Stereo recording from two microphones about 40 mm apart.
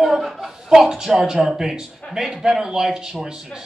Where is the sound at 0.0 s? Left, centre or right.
Centre.